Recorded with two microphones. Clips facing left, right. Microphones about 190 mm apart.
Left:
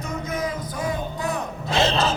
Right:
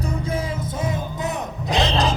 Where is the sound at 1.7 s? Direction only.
15° right (ahead or behind).